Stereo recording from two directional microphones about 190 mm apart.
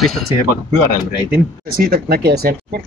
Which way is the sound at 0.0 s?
Centre (ahead or behind).